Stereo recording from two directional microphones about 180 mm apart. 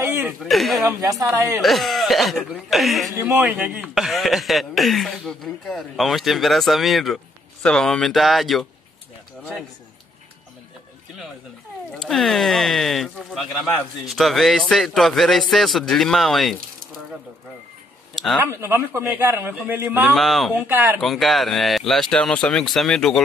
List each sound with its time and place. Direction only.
0.0 s a sound: 10° right (ahead or behind)
0.4 s speech: centre (ahead or behind)
1.2 s a man's voice: 15° right (ahead or behind)
1.6 s speech: centre (ahead or behind)
3.2 s speech: 10° right (ahead or behind)
11.9 s speech: centre (ahead or behind)
18.1 s a sound: centre (ahead or behind)
18.4 s a man's voice: 15° right (ahead or behind)
20.2 s speech: centre (ahead or behind)
20.5 s a man's voice: 10° right (ahead or behind)
21.0 s speech: centre (ahead or behind)